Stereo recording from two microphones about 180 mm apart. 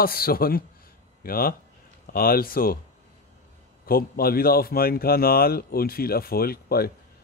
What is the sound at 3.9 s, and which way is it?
Speech, 55° left (ahead or behind).